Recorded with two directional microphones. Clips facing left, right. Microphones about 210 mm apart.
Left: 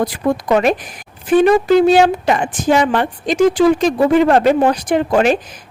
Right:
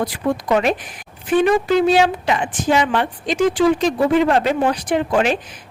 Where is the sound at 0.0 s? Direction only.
45° left (ahead or behind).